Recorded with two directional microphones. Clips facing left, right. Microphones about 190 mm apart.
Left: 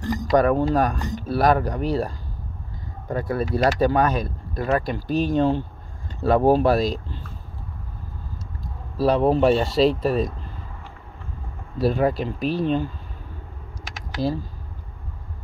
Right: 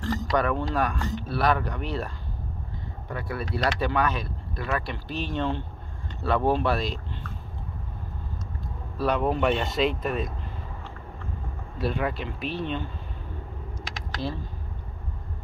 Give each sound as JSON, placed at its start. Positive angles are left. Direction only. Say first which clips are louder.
{"t": 0.0, "sound": "a sound", "louder": "left 3 dB", "side_deg": 15}
{"t": 0.3, "sound": "speech", "louder": "left 8 dB", "side_deg": 40}
{"t": 8.9, "sound": "speech", "louder": "left 6 dB", "side_deg": 35}
{"t": 11.8, "sound": "speech", "louder": "left 7 dB", "side_deg": 40}